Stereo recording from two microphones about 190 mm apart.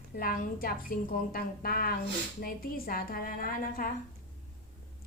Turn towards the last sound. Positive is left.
turn(degrees=50)  # may be behind; listen again after turning